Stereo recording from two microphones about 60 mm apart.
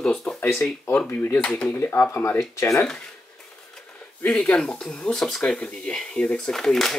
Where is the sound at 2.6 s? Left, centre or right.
Left.